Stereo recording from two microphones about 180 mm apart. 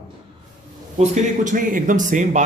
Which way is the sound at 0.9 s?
40° right (ahead or behind).